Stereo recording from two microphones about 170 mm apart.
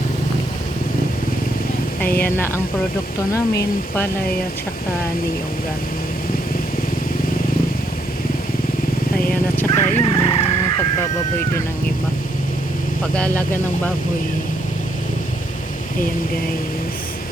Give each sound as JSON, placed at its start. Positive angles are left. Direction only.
{"t": 2.0, "sound": "speech", "side_deg": 60}
{"t": 3.3, "sound": "speech", "side_deg": 20}
{"t": 9.1, "sound": "vehicle", "side_deg": 10}
{"t": 10.1, "sound": "chicken", "side_deg": 35}
{"t": 13.1, "sound": "speech", "side_deg": 10}